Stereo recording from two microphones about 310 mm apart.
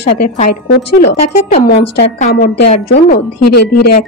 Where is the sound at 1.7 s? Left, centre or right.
Left.